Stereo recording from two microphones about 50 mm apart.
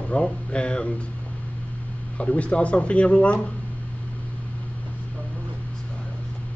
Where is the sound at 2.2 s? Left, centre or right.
Left.